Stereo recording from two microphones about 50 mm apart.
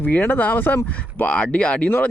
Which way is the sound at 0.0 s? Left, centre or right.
Left.